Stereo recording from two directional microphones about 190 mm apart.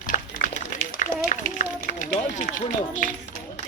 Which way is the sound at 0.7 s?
45° left (ahead or behind).